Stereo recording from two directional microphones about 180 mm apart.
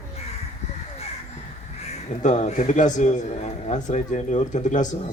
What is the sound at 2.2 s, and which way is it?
A man's voice, 40° left (ahead or behind).